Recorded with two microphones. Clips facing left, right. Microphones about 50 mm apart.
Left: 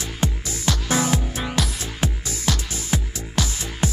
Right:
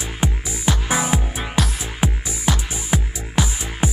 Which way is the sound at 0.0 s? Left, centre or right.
Centre.